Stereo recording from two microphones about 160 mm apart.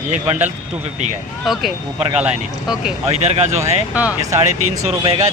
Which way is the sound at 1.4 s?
Centre (ahead or behind).